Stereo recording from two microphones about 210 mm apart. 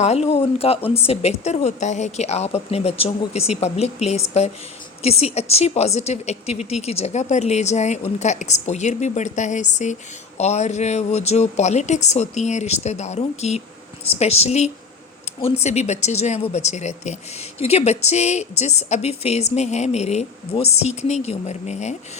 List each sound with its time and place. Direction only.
0.0 s speech: 30° left (ahead or behind)